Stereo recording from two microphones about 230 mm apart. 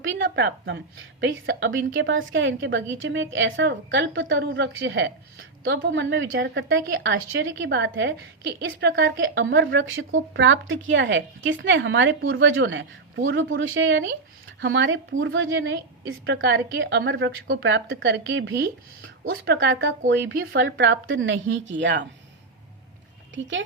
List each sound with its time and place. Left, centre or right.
0.0 s a woman's voice: right
20.4 s a woman's voice: right
23.3 s a woman's voice: right